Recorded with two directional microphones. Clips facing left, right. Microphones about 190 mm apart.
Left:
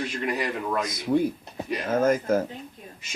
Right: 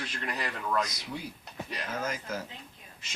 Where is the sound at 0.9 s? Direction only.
50° left (ahead or behind).